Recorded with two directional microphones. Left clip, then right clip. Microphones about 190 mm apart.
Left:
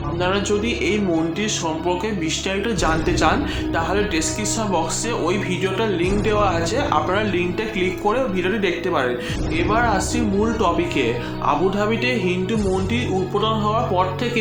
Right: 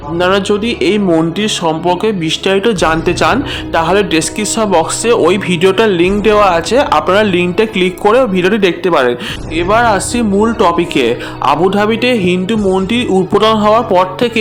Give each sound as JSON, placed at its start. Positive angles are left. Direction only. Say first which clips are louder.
{"t": 0.2, "sound": "speech", "louder": "right 9 dB", "side_deg": -55}